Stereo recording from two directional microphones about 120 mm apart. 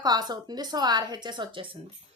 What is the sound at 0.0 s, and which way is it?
A woman's voice, 35° right (ahead or behind).